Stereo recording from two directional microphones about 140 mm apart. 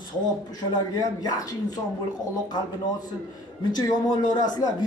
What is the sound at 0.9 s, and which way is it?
Speech, 25° left (ahead or behind).